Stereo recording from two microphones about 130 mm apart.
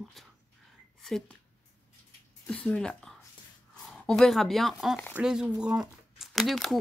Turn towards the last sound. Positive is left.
turn(degrees=0)  # may be behind; listen again after turning